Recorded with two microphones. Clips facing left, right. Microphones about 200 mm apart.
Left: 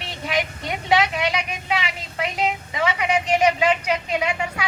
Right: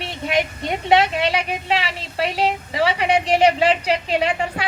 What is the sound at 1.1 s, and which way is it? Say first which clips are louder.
Speech: right 3 dB; 30° right (ahead or behind).